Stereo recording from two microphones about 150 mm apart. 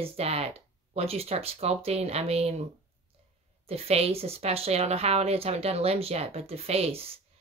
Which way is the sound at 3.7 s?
40° right (ahead or behind).